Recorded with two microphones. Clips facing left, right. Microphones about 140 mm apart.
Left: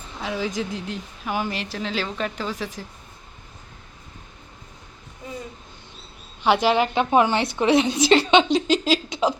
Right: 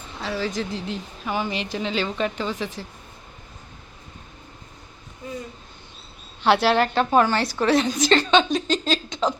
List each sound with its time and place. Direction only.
0.2 s a woman's voice: 15° left (ahead or behind)
0.5 s speech: centre (ahead or behind)
6.4 s a woman's voice: 10° left (ahead or behind)
8.0 s a woman's voice: 10° left (ahead or behind)